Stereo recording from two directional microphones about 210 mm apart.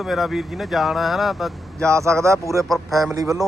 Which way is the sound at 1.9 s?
15° right (ahead or behind).